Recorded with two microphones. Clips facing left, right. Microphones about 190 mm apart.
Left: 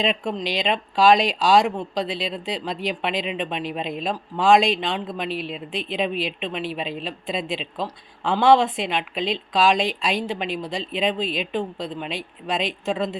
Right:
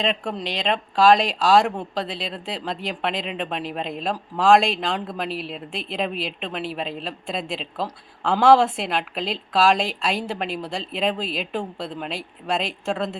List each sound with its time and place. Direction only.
0.0 s speech: centre (ahead or behind)